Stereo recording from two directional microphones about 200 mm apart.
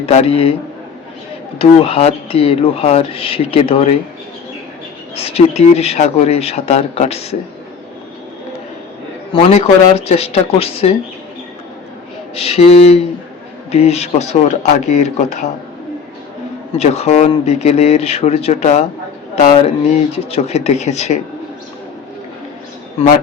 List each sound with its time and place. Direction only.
0.0 s speech: 30° left (ahead or behind)
1.5 s speech: 30° left (ahead or behind)
5.1 s speech: 30° left (ahead or behind)
9.3 s speech: 30° left (ahead or behind)
12.3 s speech: 30° left (ahead or behind)
16.7 s speech: 30° left (ahead or behind)